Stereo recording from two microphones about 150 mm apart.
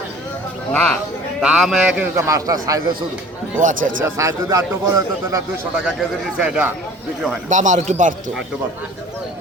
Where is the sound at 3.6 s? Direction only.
60° right (ahead or behind).